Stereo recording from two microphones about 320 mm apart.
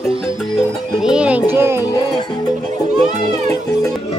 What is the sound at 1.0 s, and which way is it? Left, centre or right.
Music, centre.